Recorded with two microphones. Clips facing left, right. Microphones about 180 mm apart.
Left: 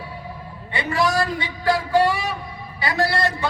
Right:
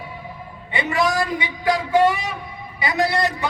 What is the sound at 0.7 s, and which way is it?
A man's voice, 20° right (ahead or behind).